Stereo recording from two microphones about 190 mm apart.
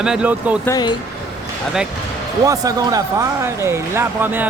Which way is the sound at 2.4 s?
20° right (ahead or behind).